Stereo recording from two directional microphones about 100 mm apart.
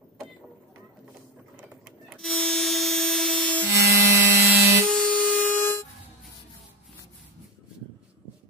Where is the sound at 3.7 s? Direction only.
30° right (ahead or behind).